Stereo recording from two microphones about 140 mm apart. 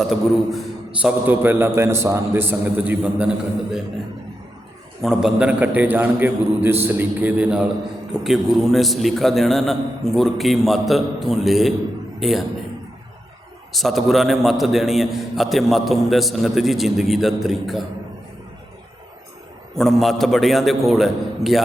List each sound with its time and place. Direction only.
0.0 s a man's voice: centre (ahead or behind)
1.0 s a man's voice: 15° right (ahead or behind)
5.0 s a man's voice: 5° right (ahead or behind)
13.7 s a man's voice: centre (ahead or behind)
19.7 s a man's voice: centre (ahead or behind)